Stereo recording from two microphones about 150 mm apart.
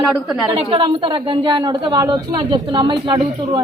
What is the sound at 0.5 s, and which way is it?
A woman's voice, 35° right (ahead or behind).